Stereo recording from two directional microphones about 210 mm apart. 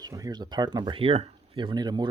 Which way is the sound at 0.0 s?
15° right (ahead or behind).